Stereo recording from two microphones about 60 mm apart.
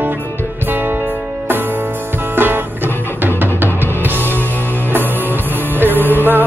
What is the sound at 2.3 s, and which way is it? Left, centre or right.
Music, right.